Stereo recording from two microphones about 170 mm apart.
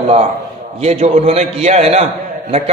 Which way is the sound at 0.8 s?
40° right (ahead or behind).